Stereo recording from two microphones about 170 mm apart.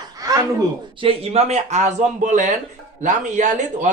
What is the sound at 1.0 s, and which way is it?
A man's voice, 35° right (ahead or behind).